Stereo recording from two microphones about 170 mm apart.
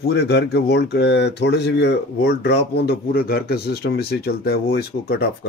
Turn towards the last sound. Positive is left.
turn(degrees=65)  # may be behind; listen again after turning